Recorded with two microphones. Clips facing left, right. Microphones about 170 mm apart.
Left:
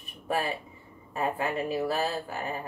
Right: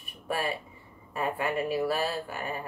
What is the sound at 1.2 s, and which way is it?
Speech, 25° left (ahead or behind).